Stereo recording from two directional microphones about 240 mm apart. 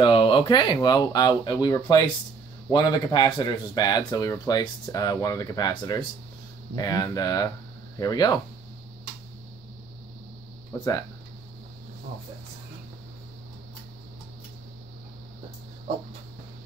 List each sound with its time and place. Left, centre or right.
0.0 s speech: left
10.8 s speech: centre